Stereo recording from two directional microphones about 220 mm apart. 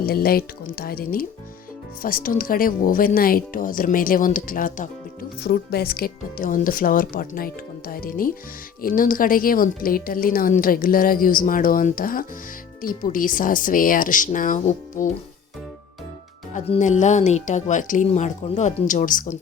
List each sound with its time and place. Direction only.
0.0 s a woman's voice: 45° left (ahead or behind)
16.6 s a woman's voice: 30° left (ahead or behind)